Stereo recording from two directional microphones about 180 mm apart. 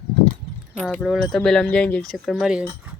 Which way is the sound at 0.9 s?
Centre (ahead or behind).